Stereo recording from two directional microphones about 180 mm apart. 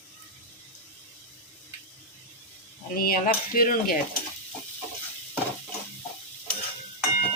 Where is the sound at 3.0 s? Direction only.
55° left (ahead or behind).